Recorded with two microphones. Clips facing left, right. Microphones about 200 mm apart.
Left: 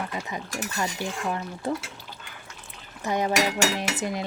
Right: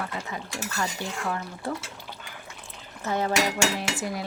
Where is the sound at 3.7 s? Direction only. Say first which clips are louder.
Left 2 dB; 20° left (ahead or behind).